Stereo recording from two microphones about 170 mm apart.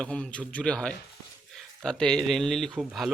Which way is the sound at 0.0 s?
5° left (ahead or behind).